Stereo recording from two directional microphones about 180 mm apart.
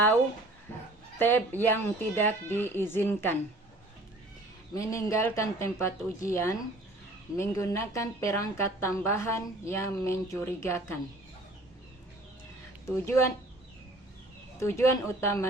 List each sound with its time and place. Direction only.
1.2 s a woman's voice: 10° left (ahead or behind)
4.7 s a woman's voice: 15° left (ahead or behind)
12.8 s a woman's voice: 15° left (ahead or behind)
14.6 s a woman's voice: 15° left (ahead or behind)